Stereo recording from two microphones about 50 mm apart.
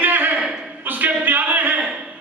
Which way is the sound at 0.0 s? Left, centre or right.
Right.